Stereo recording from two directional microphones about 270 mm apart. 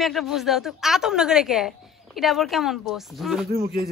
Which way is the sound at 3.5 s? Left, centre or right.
Right.